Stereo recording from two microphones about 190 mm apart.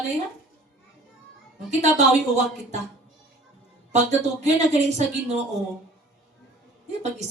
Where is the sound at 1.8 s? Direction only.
35° right (ahead or behind).